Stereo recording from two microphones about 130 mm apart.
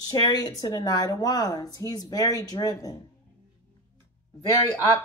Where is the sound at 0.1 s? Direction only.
30° left (ahead or behind).